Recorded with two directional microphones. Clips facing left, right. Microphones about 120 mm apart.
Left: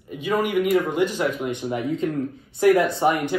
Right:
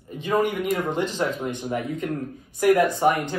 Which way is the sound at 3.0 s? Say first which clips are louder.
Even; 15° left (ahead or behind).